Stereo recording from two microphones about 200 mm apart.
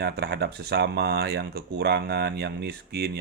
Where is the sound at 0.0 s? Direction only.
55° right (ahead or behind).